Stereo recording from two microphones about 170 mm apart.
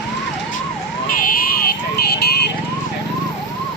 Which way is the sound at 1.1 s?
50° left (ahead or behind).